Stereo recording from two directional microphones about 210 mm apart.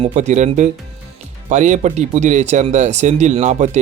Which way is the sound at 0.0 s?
35° right (ahead or behind).